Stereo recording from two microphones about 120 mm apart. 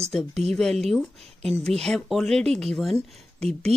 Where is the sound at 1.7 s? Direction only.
5° left (ahead or behind).